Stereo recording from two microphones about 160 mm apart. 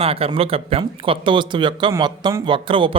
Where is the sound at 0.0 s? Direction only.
35° right (ahead or behind).